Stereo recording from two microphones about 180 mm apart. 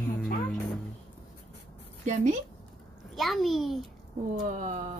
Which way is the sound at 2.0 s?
45° right (ahead or behind).